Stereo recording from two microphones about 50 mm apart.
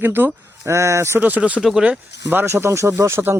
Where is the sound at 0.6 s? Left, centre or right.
Right.